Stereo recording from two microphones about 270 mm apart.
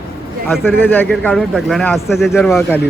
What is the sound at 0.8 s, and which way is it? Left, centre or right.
Speech, centre.